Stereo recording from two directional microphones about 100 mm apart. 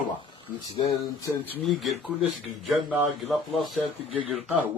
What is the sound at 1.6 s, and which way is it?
Speech, centre (ahead or behind).